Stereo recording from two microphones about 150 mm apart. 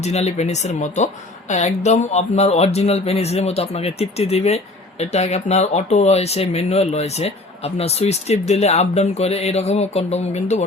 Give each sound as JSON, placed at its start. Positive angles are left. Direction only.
{"t": 0.0, "sound": "speech", "side_deg": 45}